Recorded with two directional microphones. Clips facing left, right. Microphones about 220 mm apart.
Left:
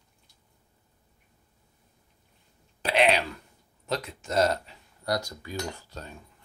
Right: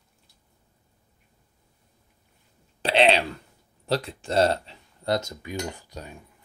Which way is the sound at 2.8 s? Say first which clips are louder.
Right 3 dB; 30° right (ahead or behind).